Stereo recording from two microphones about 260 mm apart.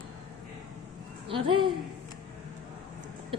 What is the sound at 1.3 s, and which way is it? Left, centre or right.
Speech, centre.